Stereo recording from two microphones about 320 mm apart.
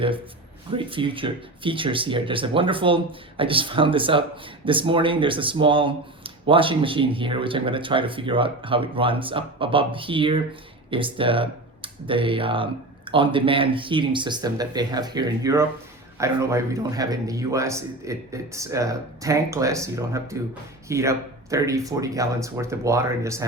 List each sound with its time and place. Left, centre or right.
0.7 s speech: centre